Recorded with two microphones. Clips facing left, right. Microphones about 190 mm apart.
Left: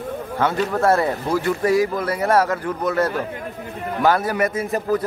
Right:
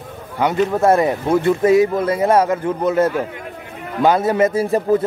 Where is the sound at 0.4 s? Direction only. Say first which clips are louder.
Right 4 dB; 20° right (ahead or behind).